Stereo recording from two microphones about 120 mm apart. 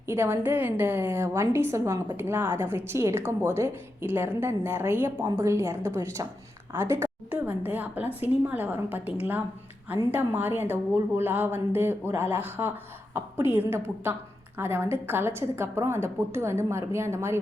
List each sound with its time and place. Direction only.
0.1 s a woman's voice: 20° right (ahead or behind)